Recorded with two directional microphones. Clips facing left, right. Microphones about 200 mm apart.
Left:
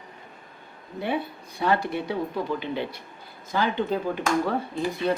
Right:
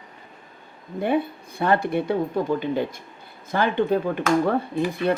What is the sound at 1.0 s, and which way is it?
Speech, 50° right (ahead or behind).